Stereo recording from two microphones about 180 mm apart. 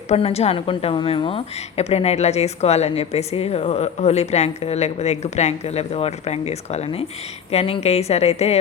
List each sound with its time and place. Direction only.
0.1 s a woman's voice: 35° left (ahead or behind)